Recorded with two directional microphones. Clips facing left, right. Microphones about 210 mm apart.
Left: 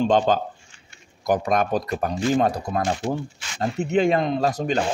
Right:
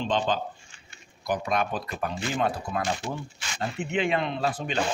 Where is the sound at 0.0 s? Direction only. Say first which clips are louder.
Left 7 dB; 45° left (ahead or behind).